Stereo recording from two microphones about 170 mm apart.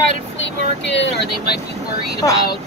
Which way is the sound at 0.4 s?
90° left.